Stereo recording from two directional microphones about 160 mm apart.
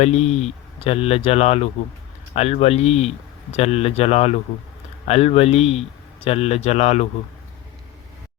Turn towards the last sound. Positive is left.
turn(degrees=45)  # may be behind; listen again after turning